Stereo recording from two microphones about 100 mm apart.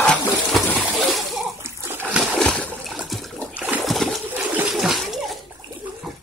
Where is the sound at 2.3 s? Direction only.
10° left (ahead or behind).